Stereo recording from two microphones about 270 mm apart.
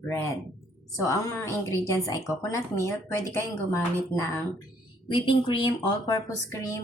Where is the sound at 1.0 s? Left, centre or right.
Centre.